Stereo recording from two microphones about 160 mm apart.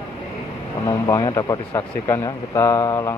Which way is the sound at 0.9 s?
20° left (ahead or behind).